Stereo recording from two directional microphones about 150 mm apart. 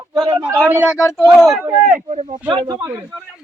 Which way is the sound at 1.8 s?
45° right (ahead or behind).